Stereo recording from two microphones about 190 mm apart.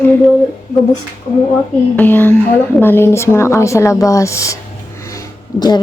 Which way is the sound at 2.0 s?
10° left (ahead or behind).